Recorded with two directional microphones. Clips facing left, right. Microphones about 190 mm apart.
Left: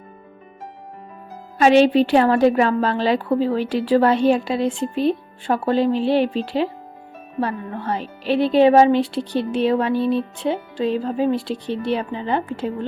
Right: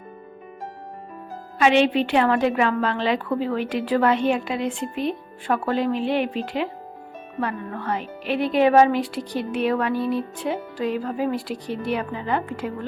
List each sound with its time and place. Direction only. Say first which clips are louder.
1.5 s a woman's voice: left 5 dB; 40° left (ahead or behind)